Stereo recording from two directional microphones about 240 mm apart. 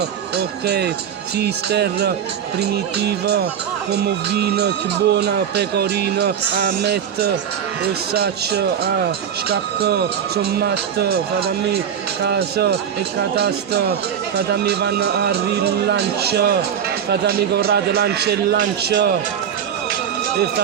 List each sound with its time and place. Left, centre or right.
0.0 s speech: right